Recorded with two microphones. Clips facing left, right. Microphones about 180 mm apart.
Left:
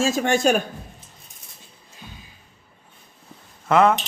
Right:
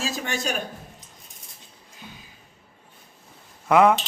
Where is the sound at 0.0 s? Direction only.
50° left (ahead or behind).